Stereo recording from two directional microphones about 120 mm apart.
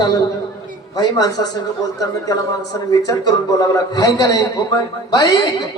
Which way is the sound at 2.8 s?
30° left (ahead or behind).